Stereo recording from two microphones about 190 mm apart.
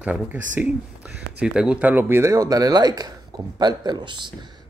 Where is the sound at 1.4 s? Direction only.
5° right (ahead or behind).